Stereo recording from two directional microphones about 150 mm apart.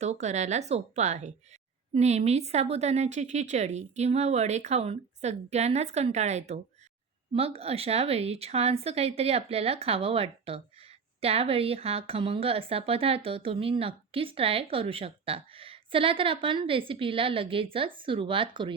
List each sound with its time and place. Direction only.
0.0 s a woman's voice: 50° right (ahead or behind)